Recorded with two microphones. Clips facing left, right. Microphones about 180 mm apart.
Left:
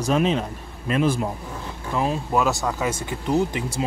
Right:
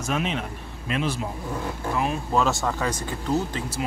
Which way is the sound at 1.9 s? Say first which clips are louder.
Left 3 dB; 25° left (ahead or behind).